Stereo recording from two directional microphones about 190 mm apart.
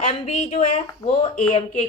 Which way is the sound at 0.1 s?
30° left (ahead or behind).